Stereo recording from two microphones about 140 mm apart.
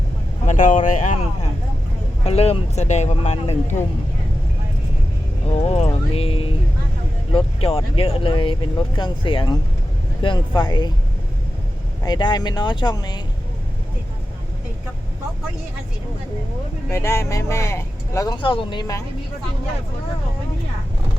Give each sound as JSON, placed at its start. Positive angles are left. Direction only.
{"t": 0.4, "sound": "speech", "side_deg": 65}
{"t": 2.2, "sound": "speech", "side_deg": 45}
{"t": 5.5, "sound": "speech", "side_deg": 45}
{"t": 12.0, "sound": "speech", "side_deg": 30}
{"t": 16.9, "sound": "speech", "side_deg": 20}
{"t": 18.3, "sound": "speech", "side_deg": 35}